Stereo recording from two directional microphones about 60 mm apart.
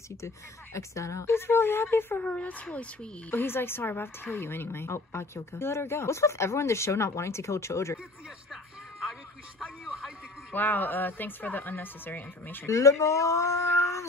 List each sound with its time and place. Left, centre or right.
0.7 s a woman's voice: left
2.1 s speech: left
3.3 s a woman's voice: left
9.6 s a sound: centre
10.5 s a woman's voice: left
12.6 s speech: left